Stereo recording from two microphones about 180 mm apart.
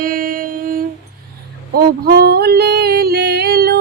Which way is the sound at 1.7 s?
60° right (ahead or behind).